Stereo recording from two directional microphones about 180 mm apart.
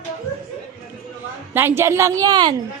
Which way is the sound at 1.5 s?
15° right (ahead or behind).